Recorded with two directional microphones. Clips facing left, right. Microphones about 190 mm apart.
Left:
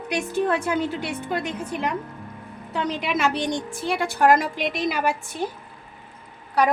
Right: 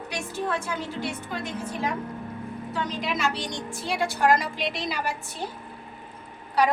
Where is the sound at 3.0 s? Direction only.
55° left (ahead or behind).